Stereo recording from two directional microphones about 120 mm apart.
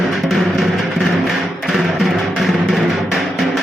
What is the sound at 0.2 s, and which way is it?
Music, centre (ahead or behind).